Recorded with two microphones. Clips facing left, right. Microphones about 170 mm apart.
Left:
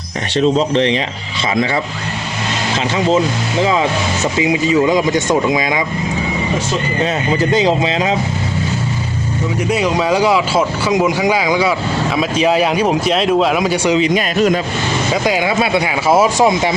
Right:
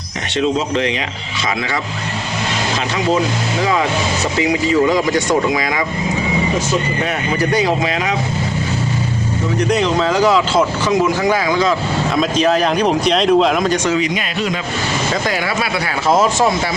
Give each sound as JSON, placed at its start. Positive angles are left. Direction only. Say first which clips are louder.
{"t": 0.3, "sound": "speech", "louder": "left 4 dB", "side_deg": 30}
{"t": 4.4, "sound": "speech", "louder": "left 1 dB", "side_deg": 20}
{"t": 7.0, "sound": "speech", "louder": "left 3 dB", "side_deg": 25}
{"t": 9.6, "sound": "speech", "louder": "left 1 dB", "side_deg": 10}
{"t": 16.0, "sound": "speech", "louder": "left 1 dB", "side_deg": 10}